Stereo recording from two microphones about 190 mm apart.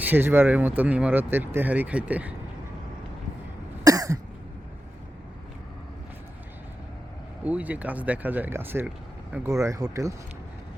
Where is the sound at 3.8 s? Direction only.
20° right (ahead or behind).